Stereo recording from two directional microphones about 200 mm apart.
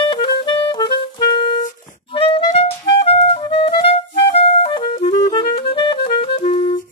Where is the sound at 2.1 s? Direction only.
25° left (ahead or behind).